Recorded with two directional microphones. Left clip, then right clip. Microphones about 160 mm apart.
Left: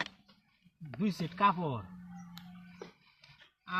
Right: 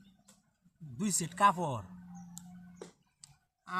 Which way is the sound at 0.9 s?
55° right (ahead or behind).